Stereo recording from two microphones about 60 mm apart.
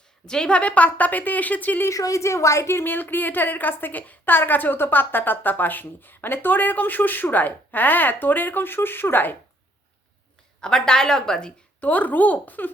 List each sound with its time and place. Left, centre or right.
0.3 s a woman's voice: centre
1.9 s a woman's voice: left
10.6 s a woman's voice: centre
11.8 s a woman's voice: left